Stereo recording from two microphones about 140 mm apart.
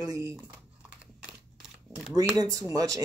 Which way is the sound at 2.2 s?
25° right (ahead or behind).